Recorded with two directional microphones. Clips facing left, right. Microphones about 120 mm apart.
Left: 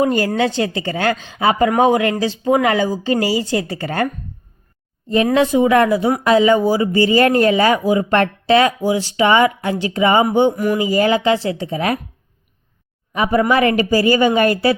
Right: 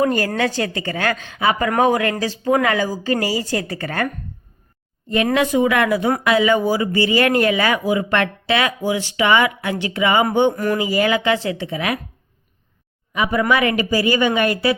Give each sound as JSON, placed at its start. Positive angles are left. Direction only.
{"t": 0.0, "sound": "a woman's voice", "side_deg": 25}
{"t": 5.5, "sound": "a woman's voice", "side_deg": 20}
{"t": 6.2, "sound": "a woman's voice", "side_deg": 35}
{"t": 10.5, "sound": "speech", "side_deg": 10}
{"t": 11.0, "sound": "speech", "side_deg": 35}
{"t": 13.1, "sound": "speech", "side_deg": 40}